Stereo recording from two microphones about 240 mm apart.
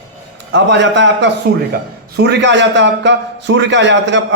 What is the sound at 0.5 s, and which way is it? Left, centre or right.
Speech, right.